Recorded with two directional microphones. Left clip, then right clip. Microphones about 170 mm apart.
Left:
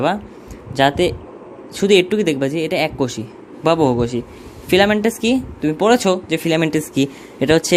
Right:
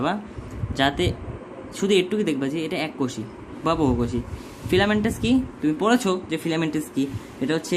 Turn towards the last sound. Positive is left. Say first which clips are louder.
# left 10 dB
turn(degrees=50)  # may be behind; listen again after turning